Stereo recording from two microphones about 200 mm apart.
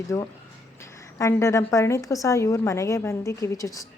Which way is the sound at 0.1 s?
10° left (ahead or behind).